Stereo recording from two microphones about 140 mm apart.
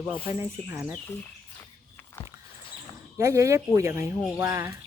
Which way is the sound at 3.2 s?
20° right (ahead or behind).